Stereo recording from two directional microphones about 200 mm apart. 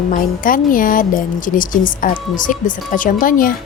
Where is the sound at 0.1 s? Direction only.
45° left (ahead or behind).